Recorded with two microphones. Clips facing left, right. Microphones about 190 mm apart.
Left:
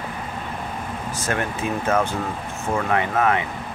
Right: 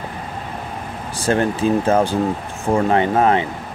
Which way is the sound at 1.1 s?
30° right (ahead or behind).